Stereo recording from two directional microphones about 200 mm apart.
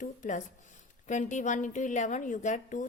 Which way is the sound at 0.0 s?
40° left (ahead or behind).